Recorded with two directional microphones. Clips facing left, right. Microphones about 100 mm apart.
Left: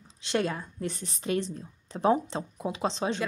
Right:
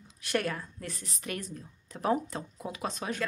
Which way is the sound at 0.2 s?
20° left (ahead or behind).